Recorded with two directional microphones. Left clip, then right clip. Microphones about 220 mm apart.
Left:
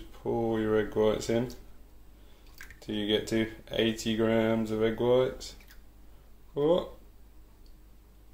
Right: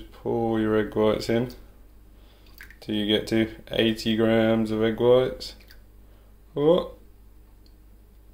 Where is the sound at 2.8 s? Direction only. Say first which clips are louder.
Right 5 dB; 20° right (ahead or behind).